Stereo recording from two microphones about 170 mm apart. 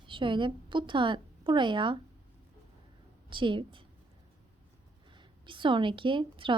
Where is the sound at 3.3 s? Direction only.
30° right (ahead or behind).